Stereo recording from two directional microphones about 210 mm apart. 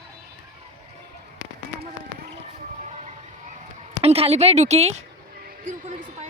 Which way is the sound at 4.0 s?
30° right (ahead or behind).